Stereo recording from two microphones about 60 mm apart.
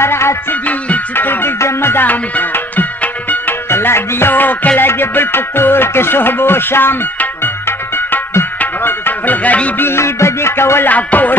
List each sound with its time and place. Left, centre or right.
0.0 s music: left
8.5 s music: left
9.8 s music: left
10.9 s speech: left